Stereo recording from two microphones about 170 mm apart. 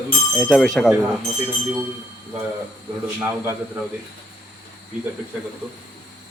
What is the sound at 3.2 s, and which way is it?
Speech, 15° right (ahead or behind).